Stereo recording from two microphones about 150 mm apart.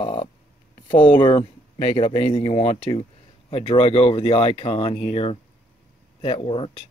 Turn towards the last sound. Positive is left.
turn(degrees=35)  # may be behind; listen again after turning